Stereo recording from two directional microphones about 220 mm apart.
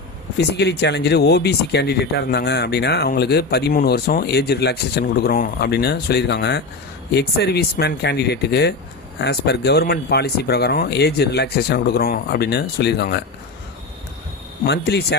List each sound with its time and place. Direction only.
0.3 s speech: 50° left (ahead or behind)
14.6 s speech: 45° left (ahead or behind)